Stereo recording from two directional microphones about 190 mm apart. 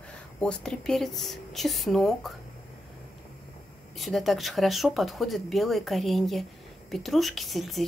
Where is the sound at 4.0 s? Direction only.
Centre (ahead or behind).